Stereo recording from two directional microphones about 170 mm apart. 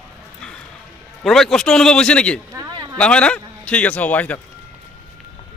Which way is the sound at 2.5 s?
25° right (ahead or behind).